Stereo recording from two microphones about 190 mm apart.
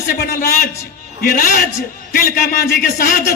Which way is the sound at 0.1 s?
55° left (ahead or behind).